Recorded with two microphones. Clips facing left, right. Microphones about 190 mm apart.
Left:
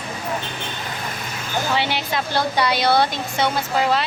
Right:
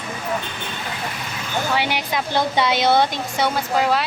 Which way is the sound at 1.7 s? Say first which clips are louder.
Even; 15° right (ahead or behind).